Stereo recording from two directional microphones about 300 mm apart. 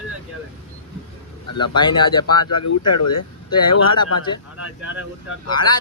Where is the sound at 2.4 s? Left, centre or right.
Left.